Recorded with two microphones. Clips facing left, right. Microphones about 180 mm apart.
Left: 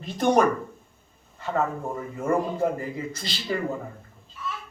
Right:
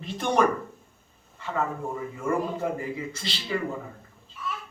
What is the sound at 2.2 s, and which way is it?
A woman's voice, 50° left (ahead or behind).